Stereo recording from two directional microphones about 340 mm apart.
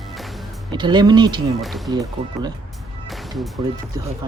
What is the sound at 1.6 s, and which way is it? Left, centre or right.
Speech, centre.